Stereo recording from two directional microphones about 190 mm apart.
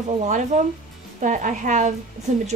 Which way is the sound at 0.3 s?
40° right (ahead or behind).